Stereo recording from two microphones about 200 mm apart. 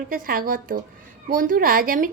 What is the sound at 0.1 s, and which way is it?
A woman's voice, 45° right (ahead or behind).